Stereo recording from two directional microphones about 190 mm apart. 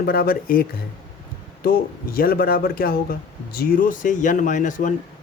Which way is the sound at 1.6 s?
50° left (ahead or behind).